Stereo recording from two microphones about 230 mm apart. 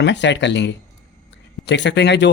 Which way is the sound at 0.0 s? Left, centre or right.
Left.